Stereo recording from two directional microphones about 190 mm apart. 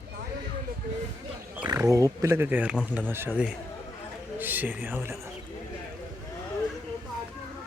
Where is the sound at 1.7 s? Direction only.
15° right (ahead or behind).